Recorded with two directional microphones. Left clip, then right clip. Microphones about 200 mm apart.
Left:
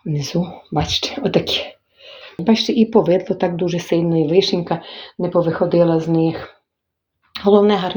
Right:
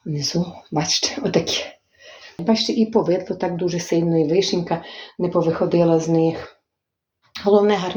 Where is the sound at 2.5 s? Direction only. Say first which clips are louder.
Left 3 dB; 40° left (ahead or behind).